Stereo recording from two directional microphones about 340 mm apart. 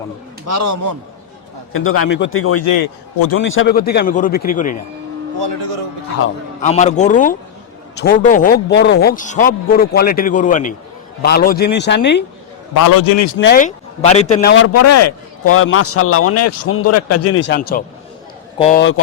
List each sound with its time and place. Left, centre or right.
0.4 s a man's voice: right
1.7 s a man's voice: left
2.6 s a man's voice: left
3.3 s a man's voice: left
6.6 s a man's voice: centre
12.7 s a man's voice: left
13.4 s a man's voice: left
14.5 s a man's voice: left
18.5 s a man's voice: centre
18.8 s a man's voice: left